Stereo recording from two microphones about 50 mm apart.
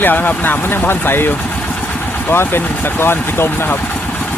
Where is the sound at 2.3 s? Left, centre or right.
Left.